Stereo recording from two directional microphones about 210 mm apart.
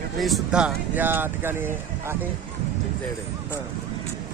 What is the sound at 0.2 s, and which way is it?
Speech, centre (ahead or behind).